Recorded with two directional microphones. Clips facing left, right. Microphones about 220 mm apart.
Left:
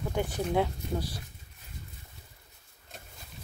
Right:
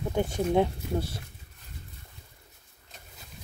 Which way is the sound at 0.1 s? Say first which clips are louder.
Right 4 dB; 25° right (ahead or behind).